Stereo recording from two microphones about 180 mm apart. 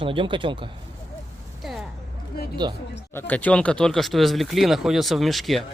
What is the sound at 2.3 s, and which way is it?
Speech, 60° left (ahead or behind).